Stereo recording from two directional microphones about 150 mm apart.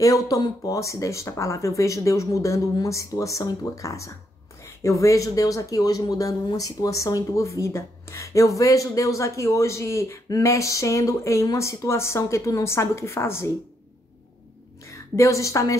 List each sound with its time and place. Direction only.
0.0 s speech: 20° left (ahead or behind)
14.9 s a woman's voice: 20° left (ahead or behind)